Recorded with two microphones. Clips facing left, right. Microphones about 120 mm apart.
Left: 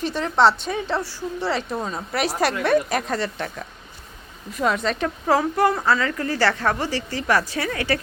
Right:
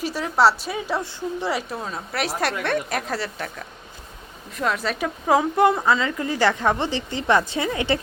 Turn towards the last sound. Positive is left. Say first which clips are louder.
# right 1 dB
turn(degrees=-20)  # may be behind; listen again after turning